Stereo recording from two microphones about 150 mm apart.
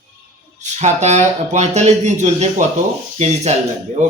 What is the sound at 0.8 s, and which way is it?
A man's voice, 50° right (ahead or behind).